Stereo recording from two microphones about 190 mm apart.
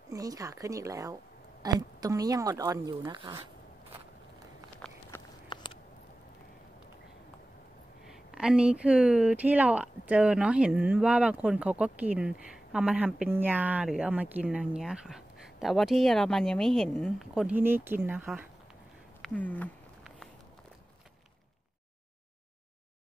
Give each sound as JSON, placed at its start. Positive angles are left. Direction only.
{"t": 0.1, "sound": "speech", "side_deg": -20}
{"t": 4.8, "sound": "walk", "side_deg": 5}
{"t": 5.5, "sound": "a sound", "side_deg": 25}
{"t": 8.1, "sound": "speech", "side_deg": -5}
{"t": 19.2, "sound": "speech", "side_deg": 10}